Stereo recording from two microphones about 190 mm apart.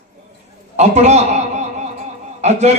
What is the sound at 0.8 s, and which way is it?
A man's voice, 35° right (ahead or behind).